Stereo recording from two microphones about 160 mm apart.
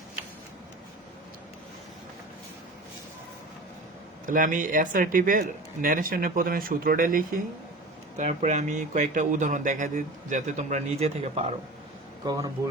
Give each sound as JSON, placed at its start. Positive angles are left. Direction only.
{"t": 4.3, "sound": "speech", "side_deg": -55}
{"t": 8.2, "sound": "speech", "side_deg": -45}
{"t": 12.2, "sound": "speech", "side_deg": -25}